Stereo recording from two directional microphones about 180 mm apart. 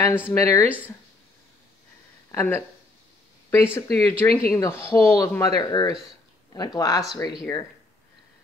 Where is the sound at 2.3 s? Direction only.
15° left (ahead or behind).